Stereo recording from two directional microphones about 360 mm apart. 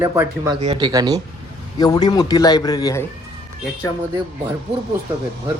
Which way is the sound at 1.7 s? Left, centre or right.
Centre.